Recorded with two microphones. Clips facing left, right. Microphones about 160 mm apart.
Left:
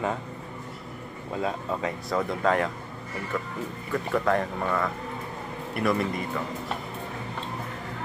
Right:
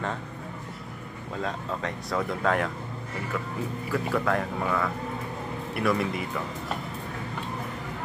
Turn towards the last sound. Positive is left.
turn(degrees=0)  # may be behind; listen again after turning